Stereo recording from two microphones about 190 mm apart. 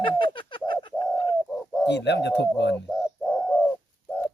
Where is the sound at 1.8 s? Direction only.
65° left (ahead or behind).